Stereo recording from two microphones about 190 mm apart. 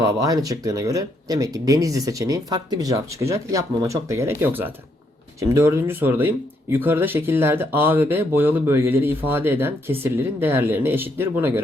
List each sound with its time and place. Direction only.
0.0 s speech: 20° right (ahead or behind)